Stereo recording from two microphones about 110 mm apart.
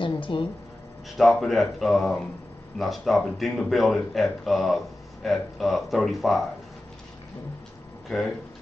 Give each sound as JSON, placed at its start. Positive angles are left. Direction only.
{"t": 0.0, "sound": "a sound", "side_deg": 45}
{"t": 1.1, "sound": "speech", "side_deg": 0}
{"t": 8.1, "sound": "speech", "side_deg": 0}